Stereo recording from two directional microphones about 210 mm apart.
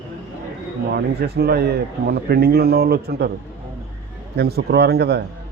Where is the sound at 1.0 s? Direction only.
50° right (ahead or behind).